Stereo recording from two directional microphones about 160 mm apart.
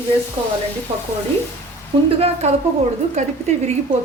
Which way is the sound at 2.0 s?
40° right (ahead or behind).